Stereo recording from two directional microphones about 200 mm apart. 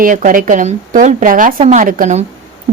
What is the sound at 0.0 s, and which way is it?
A woman's voice, 40° right (ahead or behind).